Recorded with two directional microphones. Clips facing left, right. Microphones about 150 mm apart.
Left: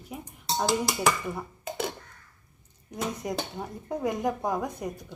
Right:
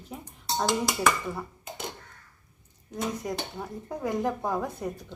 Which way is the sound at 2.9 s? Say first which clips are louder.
Even; 15° left (ahead or behind).